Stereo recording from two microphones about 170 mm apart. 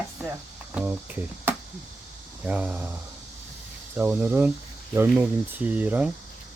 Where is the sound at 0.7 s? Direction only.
10° right (ahead or behind).